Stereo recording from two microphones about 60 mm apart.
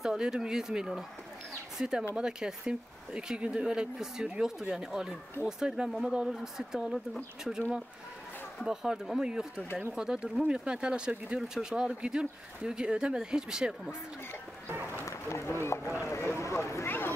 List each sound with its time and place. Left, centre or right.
0.0 s speech: centre
1.5 s a sound: centre
2.1 s speech: centre
8.5 s speech: centre
15.0 s run: left
15.6 s speech: left
16.1 s run: left
16.6 s a sound: left